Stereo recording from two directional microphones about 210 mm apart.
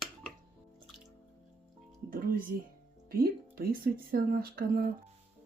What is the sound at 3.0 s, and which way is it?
Speech, 45° right (ahead or behind).